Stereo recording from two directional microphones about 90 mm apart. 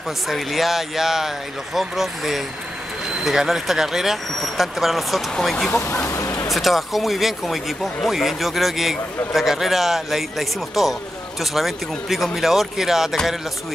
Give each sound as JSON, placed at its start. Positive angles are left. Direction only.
{"t": 0.3, "sound": "speech", "side_deg": 0}
{"t": 5.8, "sound": "speech", "side_deg": 30}
{"t": 6.5, "sound": "speech", "side_deg": 0}